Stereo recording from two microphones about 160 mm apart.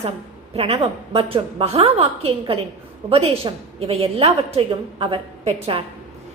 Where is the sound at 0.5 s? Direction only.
40° right (ahead or behind).